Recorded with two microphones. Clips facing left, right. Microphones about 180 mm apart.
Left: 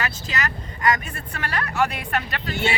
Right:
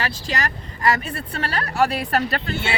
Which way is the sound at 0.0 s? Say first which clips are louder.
Right 2 dB; 35° right (ahead or behind).